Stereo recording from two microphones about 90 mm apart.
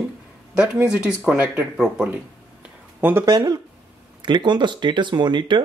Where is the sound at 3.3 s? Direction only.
55° right (ahead or behind).